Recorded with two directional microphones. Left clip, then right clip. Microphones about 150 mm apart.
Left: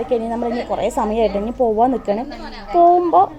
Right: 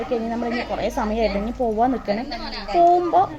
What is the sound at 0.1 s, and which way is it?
A woman's voice, 35° left (ahead or behind).